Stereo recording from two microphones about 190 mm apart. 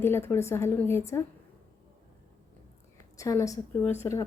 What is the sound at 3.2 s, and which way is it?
A woman's voice, 15° left (ahead or behind).